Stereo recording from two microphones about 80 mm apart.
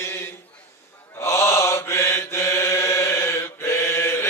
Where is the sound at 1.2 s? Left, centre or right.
Left.